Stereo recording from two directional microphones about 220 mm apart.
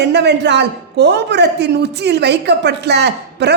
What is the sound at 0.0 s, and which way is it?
Speech, 50° right (ahead or behind).